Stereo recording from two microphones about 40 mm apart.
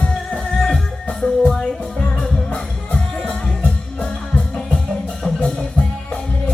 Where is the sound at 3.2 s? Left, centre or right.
Left.